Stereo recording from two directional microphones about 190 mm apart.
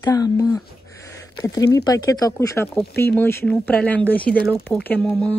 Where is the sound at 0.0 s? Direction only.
20° left (ahead or behind).